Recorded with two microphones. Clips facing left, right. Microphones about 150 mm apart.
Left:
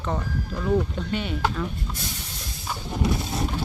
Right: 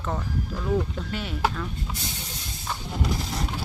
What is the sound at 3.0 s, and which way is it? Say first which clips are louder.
Horse: left 4 dB; 25° left (ahead or behind).